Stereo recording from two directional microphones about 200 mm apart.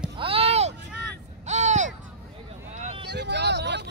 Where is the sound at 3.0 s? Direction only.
60° right (ahead or behind).